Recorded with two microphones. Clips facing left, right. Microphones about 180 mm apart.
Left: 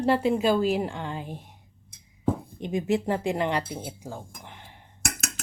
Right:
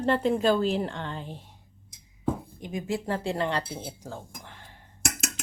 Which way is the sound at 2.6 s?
25° left (ahead or behind).